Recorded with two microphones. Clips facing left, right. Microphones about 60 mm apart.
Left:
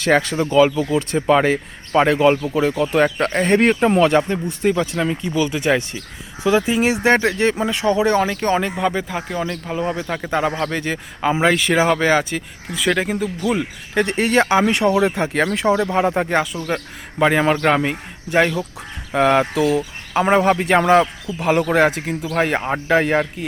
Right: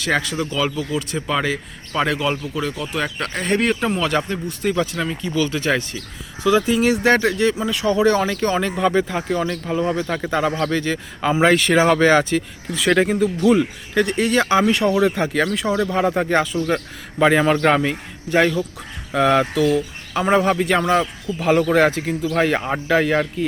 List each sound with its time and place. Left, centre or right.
0.0 s speech: left
8.7 s a man's voice: centre
11.3 s speech: centre
13.9 s speech: left
16.3 s a man's voice: centre
20.6 s speech: left
21.3 s a man's voice: centre